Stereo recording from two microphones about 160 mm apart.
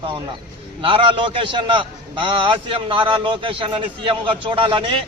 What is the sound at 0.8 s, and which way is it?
A man's voice, 35° right (ahead or behind).